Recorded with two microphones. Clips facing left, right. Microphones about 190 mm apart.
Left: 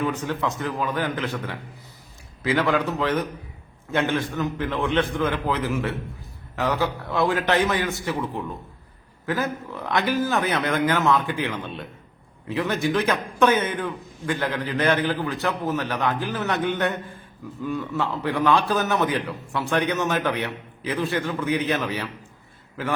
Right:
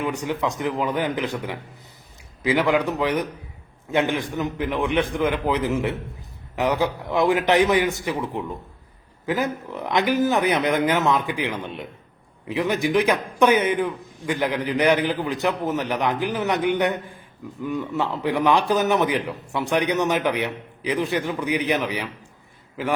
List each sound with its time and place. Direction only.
0.0 s a man's voice: 15° right (ahead or behind)